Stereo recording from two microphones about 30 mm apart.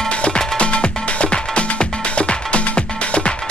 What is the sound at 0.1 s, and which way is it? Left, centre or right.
Music, left.